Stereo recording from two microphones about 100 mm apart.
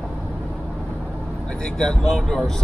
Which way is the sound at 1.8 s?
10° left (ahead or behind).